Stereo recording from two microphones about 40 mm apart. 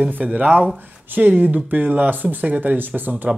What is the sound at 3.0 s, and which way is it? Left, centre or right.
Speech, right.